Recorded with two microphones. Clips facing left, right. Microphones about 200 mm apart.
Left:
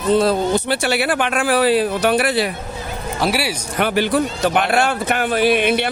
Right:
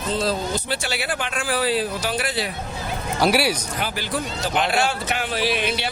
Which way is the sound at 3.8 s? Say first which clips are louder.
Left 14 dB; 65° left (ahead or behind).